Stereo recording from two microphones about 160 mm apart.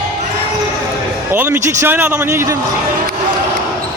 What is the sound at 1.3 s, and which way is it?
Speech, 10° right (ahead or behind).